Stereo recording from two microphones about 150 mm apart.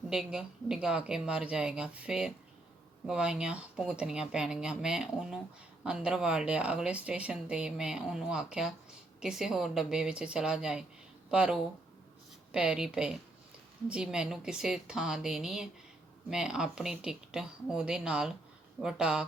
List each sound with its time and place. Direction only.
0.1 s speech: 5° right (ahead or behind)